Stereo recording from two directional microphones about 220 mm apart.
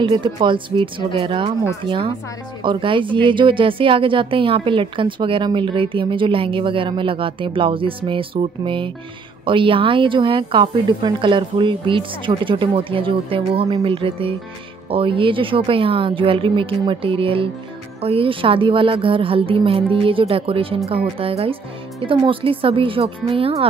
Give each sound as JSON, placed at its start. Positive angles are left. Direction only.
{"t": 0.0, "sound": "speech", "side_deg": -20}